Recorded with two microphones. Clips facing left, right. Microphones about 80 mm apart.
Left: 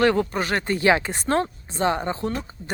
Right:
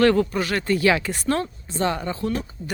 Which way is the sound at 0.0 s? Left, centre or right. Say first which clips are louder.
Right 2 dB; centre.